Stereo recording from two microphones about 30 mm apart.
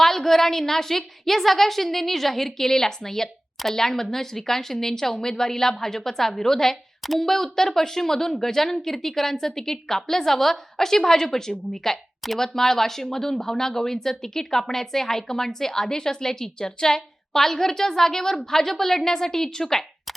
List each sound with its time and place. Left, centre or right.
0.0 s speech: centre
7.0 s speech: centre
7.3 s speech: centre